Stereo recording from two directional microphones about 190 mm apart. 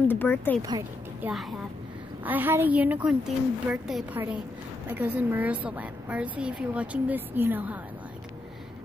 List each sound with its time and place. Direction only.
0.1 s speech: 10° left (ahead or behind)
0.6 s speech: 20° right (ahead or behind)
1.2 s a woman's voice: centre (ahead or behind)